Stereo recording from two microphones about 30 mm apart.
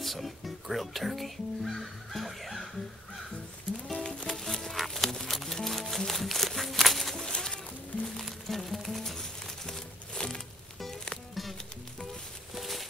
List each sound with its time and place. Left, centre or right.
0.0 s speech: centre
3.9 s music: left
4.4 s music: centre
7.2 s goat: left
8.5 s music: centre
9.0 s crumpling: centre
10.1 s a sound: left
12.5 s a sound: centre